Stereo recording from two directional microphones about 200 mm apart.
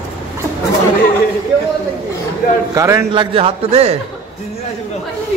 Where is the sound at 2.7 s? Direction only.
15° right (ahead or behind).